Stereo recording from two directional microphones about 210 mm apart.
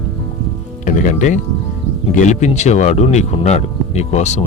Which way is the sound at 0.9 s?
40° left (ahead or behind).